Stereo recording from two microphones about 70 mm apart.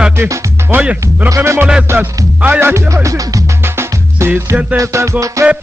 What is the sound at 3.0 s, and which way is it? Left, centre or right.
Speech, right.